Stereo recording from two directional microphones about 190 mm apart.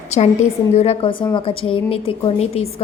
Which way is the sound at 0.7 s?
35° left (ahead or behind).